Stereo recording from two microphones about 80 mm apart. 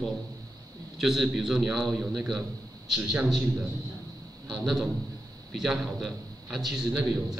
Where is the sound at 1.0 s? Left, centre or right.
Centre.